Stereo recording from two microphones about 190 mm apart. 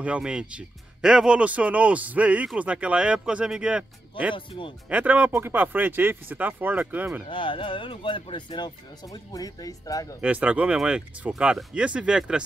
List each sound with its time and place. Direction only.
0.0 s speech: 5° right (ahead or behind)
4.5 s speech: 25° left (ahead or behind)
4.8 s speech: 10° right (ahead or behind)
7.2 s speech: 25° left (ahead or behind)
10.2 s speech: 5° right (ahead or behind)